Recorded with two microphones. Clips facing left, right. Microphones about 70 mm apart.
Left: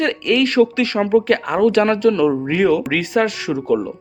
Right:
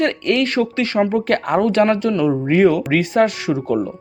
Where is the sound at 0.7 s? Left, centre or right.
Right.